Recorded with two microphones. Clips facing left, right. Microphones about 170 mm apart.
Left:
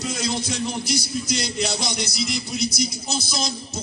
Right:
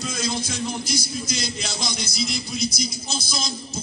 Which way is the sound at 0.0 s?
70° left (ahead or behind).